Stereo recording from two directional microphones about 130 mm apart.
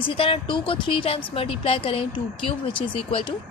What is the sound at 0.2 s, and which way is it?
A woman's voice, 40° left (ahead or behind).